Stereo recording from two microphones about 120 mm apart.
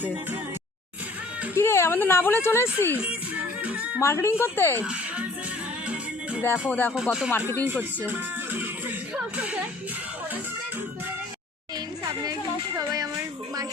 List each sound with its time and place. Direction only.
1.5 s speech: 20° left (ahead or behind)
3.6 s music: 10° right (ahead or behind)
4.0 s speech: 20° left (ahead or behind)
4.8 s speech: 15° right (ahead or behind)
6.7 s speech: 15° left (ahead or behind)
7.7 s speech: 15° right (ahead or behind)
12.2 s speech: 30° right (ahead or behind)